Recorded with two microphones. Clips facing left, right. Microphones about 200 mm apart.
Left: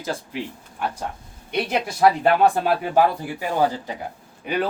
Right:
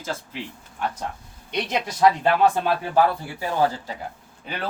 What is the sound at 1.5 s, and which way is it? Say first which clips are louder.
A man's voice: left 2 dB; 10° left (ahead or behind).